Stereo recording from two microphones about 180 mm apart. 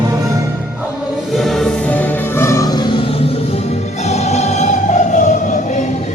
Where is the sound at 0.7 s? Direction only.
Centre (ahead or behind).